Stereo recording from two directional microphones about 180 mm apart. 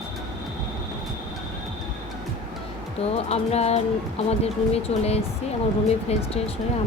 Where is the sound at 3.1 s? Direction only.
35° left (ahead or behind).